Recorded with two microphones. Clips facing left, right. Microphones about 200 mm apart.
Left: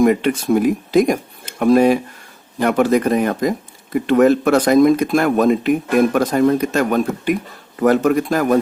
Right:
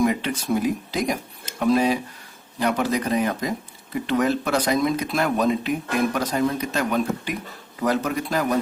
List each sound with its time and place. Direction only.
0.0 s speech: 55° left (ahead or behind)